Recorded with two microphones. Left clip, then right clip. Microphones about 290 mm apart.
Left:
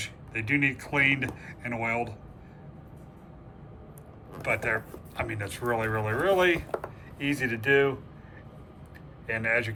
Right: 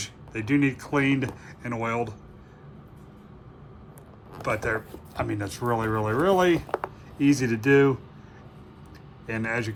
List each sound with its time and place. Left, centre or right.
0.0 s speech: centre
4.4 s speech: centre
9.2 s speech: centre